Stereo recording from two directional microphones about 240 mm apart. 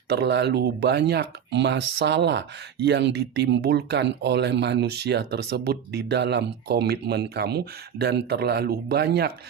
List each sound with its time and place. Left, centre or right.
0.1 s speech: right